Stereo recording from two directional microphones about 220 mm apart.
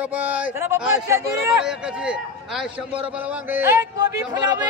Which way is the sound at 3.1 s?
5° right (ahead or behind).